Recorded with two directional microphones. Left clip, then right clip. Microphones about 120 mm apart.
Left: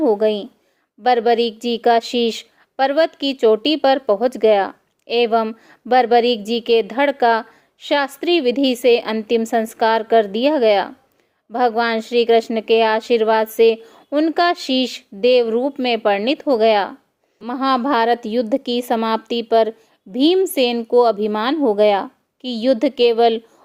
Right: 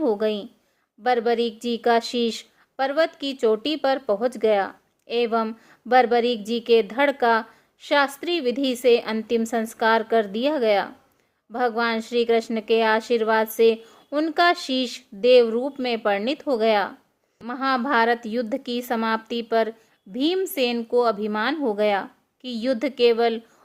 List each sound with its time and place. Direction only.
0.0 s a woman's voice: 40° left (ahead or behind)